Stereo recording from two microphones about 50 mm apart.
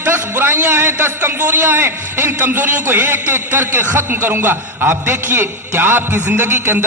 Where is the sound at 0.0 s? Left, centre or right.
Right.